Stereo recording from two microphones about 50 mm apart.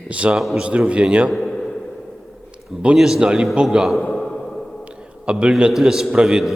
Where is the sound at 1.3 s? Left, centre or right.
Centre.